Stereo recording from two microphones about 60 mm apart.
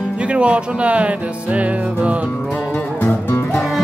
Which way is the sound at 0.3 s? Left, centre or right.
Centre.